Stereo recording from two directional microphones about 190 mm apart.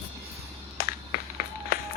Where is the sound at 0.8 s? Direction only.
55° left (ahead or behind).